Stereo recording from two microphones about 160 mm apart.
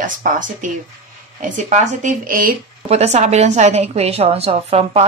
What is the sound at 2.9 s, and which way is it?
A woman's voice, 45° right (ahead or behind).